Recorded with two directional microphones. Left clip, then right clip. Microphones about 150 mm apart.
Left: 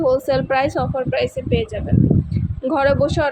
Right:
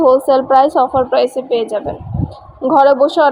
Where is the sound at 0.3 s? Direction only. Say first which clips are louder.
Right 8 dB; 40° left (ahead or behind).